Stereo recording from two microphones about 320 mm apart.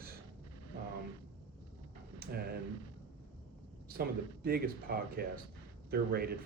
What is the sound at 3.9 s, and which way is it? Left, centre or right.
Speech, right.